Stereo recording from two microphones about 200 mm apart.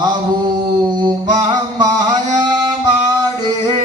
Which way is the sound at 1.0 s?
20° right (ahead or behind).